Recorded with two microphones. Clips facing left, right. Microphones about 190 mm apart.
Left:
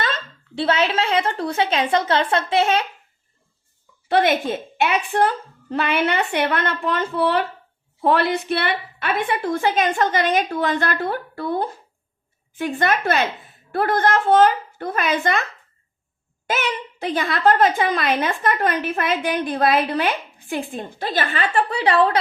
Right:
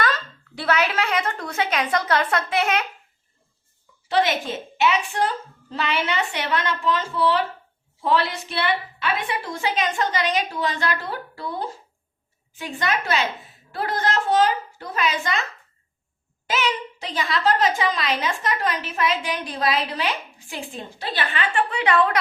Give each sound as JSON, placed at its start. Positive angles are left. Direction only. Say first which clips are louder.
{"t": 0.0, "sound": "speech", "louder": "right 1 dB", "side_deg": 25}
{"t": 4.1, "sound": "a woman's voice", "louder": "left 4 dB", "side_deg": 55}
{"t": 16.5, "sound": "a woman's voice", "louder": "even", "side_deg": 55}